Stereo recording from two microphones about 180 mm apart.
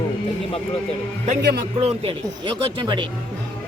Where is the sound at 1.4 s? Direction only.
65° right (ahead or behind).